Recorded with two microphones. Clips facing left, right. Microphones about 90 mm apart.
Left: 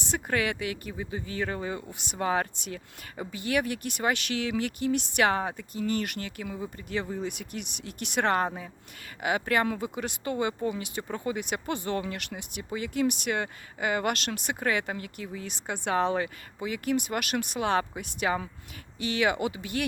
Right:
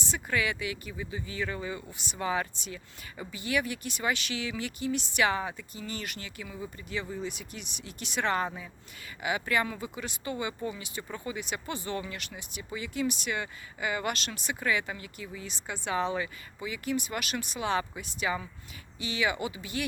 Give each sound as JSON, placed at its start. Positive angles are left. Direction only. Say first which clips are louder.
{"t": 0.0, "sound": "speech", "louder": "left 2 dB", "side_deg": 55}